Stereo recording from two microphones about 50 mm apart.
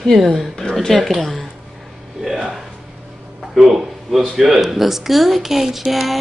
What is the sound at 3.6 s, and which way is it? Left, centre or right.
Speech, centre.